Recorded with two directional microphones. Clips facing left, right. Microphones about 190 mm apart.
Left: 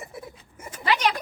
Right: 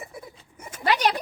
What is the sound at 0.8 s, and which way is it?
Speech, 40° right (ahead or behind).